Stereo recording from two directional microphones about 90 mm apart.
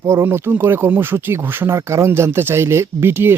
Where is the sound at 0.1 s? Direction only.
30° right (ahead or behind).